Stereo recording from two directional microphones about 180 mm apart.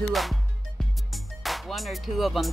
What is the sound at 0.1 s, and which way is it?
Speech, centre (ahead or behind).